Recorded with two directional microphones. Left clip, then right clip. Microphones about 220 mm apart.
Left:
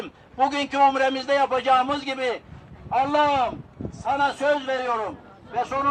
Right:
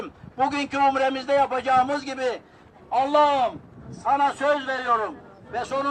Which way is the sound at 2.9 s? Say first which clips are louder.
Right 1 dB; 15° left (ahead or behind).